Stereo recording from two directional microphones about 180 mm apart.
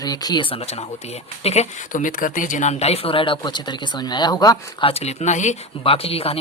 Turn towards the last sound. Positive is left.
turn(degrees=35)  # may be behind; listen again after turning